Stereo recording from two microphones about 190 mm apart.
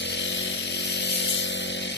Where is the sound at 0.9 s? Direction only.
65° left (ahead or behind).